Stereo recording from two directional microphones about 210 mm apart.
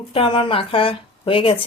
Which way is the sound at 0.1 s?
25° left (ahead or behind).